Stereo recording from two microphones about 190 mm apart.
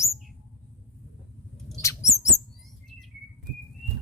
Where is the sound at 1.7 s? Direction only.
15° left (ahead or behind).